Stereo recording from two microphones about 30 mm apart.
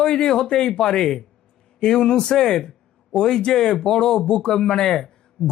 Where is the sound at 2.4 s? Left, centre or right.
Centre.